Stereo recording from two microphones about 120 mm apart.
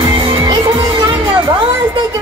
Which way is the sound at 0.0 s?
40° right (ahead or behind).